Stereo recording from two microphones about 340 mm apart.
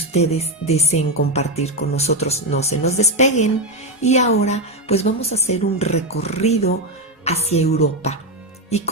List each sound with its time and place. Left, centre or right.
0.1 s a woman's voice: centre